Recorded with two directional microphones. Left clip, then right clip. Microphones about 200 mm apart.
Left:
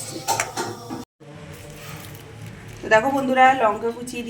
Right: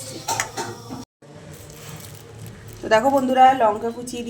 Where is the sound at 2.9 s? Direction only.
20° right (ahead or behind).